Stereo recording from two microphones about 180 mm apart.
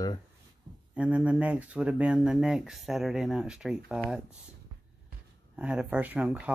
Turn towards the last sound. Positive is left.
turn(degrees=-10)  # may be behind; listen again after turning